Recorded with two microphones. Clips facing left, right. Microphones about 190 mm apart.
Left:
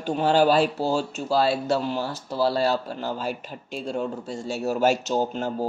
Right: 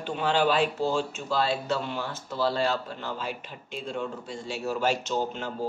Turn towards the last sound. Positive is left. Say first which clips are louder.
# left 4 dB
turn(degrees=40)  # may be behind; listen again after turning